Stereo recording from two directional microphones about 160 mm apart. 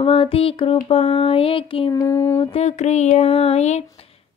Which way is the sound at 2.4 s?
40° left (ahead or behind).